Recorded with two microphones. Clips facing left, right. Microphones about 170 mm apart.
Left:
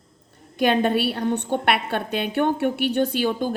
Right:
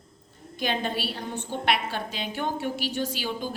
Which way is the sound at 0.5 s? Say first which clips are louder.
Left 9 dB; 60° left (ahead or behind).